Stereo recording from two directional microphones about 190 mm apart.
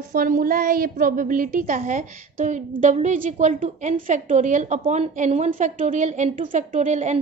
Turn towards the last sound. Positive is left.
turn(degrees=-40)  # may be behind; listen again after turning